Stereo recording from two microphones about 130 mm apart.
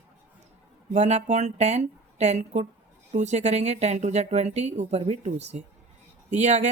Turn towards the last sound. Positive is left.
turn(degrees=-65)  # may be behind; listen again after turning